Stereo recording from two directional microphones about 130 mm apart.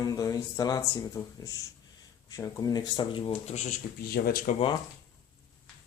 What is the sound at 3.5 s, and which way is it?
Speech, 65° left (ahead or behind).